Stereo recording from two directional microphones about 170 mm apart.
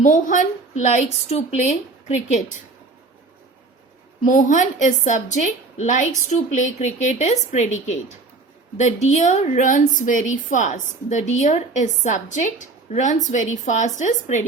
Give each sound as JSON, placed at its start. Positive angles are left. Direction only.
{"t": 0.0, "sound": "a woman's voice", "side_deg": 50}
{"t": 4.3, "sound": "a woman's voice", "side_deg": 50}